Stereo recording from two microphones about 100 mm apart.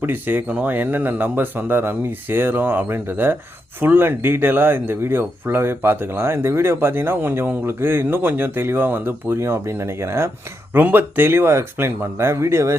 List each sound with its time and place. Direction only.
0.0 s speech: 20° right (ahead or behind)